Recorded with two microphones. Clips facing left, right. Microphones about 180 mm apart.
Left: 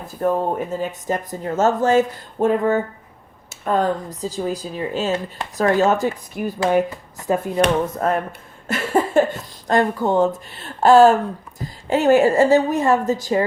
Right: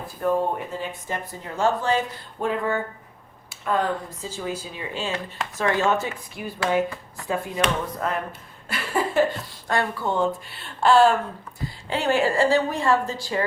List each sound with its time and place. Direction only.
0.2 s speech: 45° left (ahead or behind)